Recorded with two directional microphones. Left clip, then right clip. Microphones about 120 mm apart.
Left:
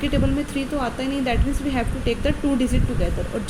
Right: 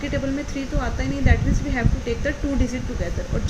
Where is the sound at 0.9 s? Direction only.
40° left (ahead or behind).